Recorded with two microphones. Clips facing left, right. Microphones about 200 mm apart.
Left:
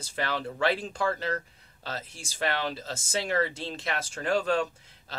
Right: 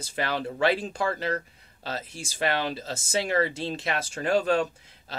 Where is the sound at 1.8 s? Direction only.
10° right (ahead or behind).